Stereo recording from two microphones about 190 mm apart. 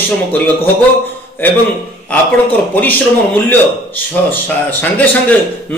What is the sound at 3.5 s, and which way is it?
Speech, 10° left (ahead or behind).